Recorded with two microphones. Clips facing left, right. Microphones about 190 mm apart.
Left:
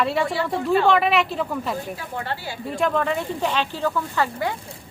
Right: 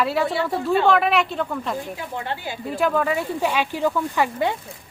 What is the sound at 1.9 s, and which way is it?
Speech, 15° right (ahead or behind).